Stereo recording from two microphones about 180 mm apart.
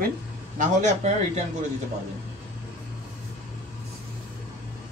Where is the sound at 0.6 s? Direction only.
40° right (ahead or behind).